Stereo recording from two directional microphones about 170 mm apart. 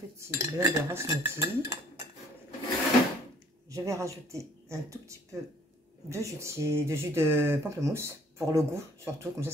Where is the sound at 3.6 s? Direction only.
20° right (ahead or behind).